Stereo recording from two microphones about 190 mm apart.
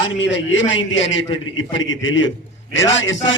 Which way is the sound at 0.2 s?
70° left (ahead or behind).